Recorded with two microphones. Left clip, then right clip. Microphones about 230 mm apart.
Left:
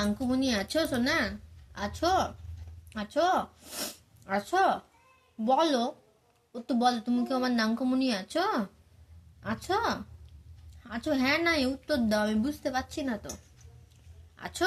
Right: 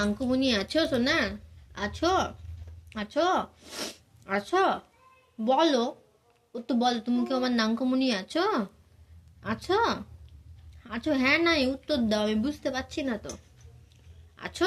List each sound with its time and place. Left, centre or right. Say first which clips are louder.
0.0 s a woman's voice: right 3 dB; left
14.3 s speech: right 2 dB; left